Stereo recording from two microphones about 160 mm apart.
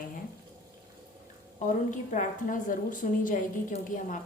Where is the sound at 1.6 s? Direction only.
55° left (ahead or behind).